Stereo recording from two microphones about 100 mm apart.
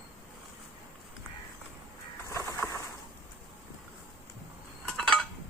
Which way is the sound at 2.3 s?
30° left (ahead or behind).